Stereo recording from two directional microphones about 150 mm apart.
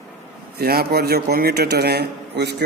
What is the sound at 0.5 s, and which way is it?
Speech, 90° right.